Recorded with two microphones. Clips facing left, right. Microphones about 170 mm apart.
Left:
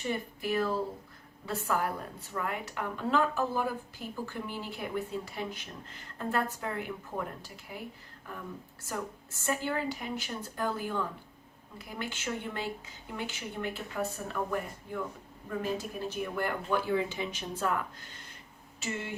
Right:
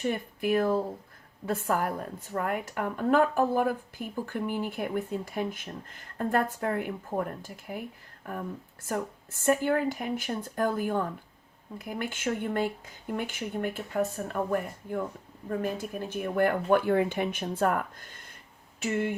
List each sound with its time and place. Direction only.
0.0 s a woman's voice: 50° right (ahead or behind)
8.9 s a woman's voice: 55° right (ahead or behind)